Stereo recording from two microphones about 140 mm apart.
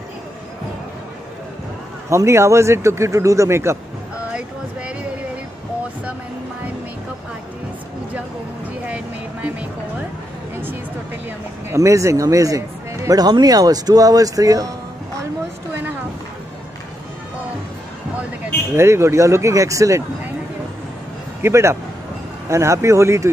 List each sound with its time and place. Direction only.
2.0 s speech: 20° right (ahead or behind)
4.3 s a sound: 10° right (ahead or behind)
8.8 s vehicle: 10° right (ahead or behind)
10.5 s a sound: 15° right (ahead or behind)
11.7 s speech: 20° right (ahead or behind)
18.8 s speech: 20° right (ahead or behind)
21.4 s a man's voice: 20° right (ahead or behind)